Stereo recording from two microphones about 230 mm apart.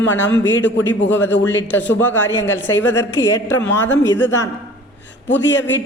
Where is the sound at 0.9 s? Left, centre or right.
Centre.